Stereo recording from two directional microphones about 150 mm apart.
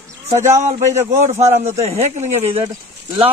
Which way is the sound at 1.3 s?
50° right (ahead or behind).